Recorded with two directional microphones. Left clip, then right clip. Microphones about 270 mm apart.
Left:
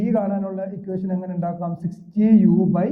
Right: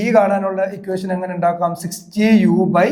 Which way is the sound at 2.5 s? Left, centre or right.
Right.